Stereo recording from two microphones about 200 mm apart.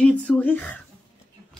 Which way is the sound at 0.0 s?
5° left (ahead or behind).